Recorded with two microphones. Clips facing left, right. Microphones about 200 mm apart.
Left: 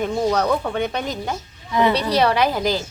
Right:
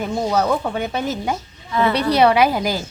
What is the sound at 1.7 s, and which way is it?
Speech, 15° left (ahead or behind).